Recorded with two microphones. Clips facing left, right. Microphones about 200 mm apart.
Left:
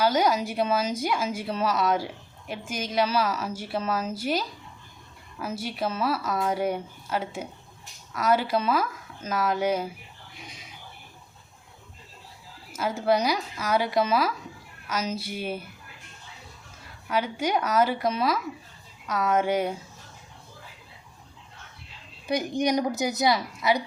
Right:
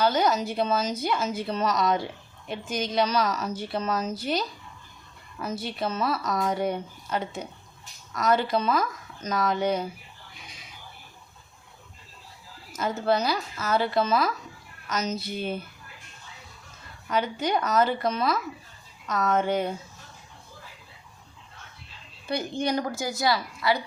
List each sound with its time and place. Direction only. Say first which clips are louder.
0.0 s a woman's voice: even; 10° left (ahead or behind)
12.7 s a woman's voice: left 1 dB; 10° left (ahead or behind)
17.1 s a woman's voice: even; 10° left (ahead or behind)
22.3 s a woman's voice: left 3 dB; 15° left (ahead or behind)